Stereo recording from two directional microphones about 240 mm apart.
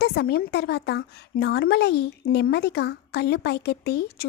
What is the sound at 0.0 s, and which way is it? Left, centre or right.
A woman's voice, left.